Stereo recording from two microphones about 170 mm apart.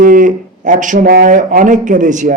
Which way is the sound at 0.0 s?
50° right (ahead or behind).